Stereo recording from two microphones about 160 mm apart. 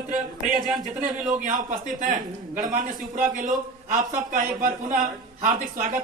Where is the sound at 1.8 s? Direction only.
55° right (ahead or behind).